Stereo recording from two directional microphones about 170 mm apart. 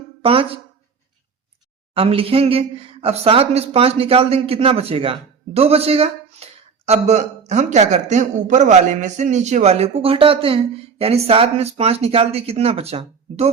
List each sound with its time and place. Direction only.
0.2 s speech: 35° right (ahead or behind)
1.9 s speech: 35° right (ahead or behind)